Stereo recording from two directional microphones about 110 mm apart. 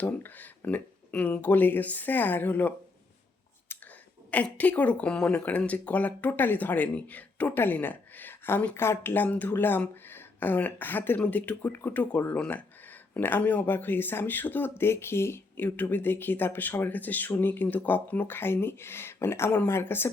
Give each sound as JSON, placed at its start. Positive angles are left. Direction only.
{"t": 0.0, "sound": "speech", "side_deg": 15}
{"t": 3.7, "sound": "a sound", "side_deg": 20}
{"t": 4.3, "sound": "speech", "side_deg": 15}